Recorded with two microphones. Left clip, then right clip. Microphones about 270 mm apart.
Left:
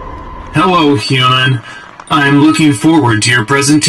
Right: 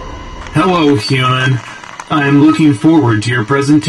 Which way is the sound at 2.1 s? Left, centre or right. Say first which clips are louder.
Left 1 dB; left.